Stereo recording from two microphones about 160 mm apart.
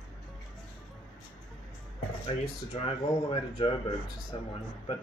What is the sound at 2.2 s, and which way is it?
A man's voice, 35° left (ahead or behind).